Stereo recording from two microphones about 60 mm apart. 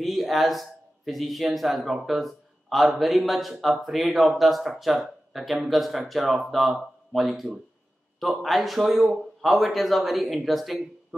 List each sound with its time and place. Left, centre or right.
0.0 s a man's voice: centre